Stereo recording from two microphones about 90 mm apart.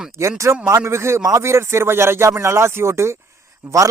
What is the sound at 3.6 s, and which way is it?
Speech, 15° right (ahead or behind).